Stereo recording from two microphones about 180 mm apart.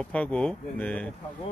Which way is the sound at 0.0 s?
5° left (ahead or behind).